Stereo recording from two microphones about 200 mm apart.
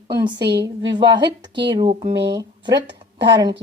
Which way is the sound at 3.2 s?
20° right (ahead or behind).